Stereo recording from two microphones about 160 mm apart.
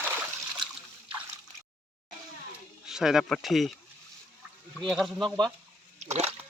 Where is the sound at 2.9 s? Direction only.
5° right (ahead or behind).